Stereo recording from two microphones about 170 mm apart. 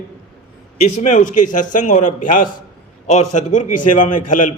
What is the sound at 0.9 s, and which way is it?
A man's voice, 45° left (ahead or behind).